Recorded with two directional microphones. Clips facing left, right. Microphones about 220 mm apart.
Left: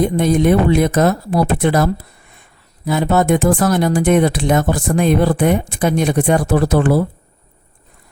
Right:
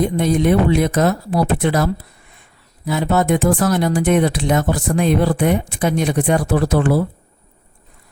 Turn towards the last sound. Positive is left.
turn(degrees=45)  # may be behind; listen again after turning